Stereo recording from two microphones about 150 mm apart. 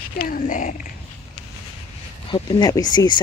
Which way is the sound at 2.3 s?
25° left (ahead or behind).